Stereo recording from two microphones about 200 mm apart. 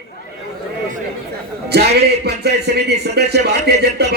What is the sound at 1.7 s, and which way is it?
A man's voice, 55° right (ahead or behind).